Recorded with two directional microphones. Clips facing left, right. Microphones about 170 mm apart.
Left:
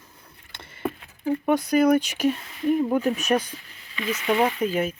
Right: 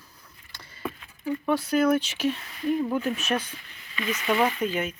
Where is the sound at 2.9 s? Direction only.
35° left (ahead or behind).